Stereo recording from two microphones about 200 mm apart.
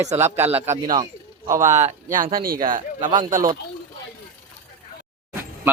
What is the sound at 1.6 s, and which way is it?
Speech, 40° right (ahead or behind).